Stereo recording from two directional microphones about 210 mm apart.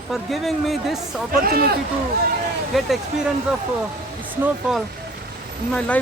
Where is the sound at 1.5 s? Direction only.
45° right (ahead or behind).